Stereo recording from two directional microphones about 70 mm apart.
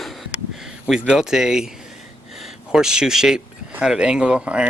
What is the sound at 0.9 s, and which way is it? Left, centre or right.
Speech, centre.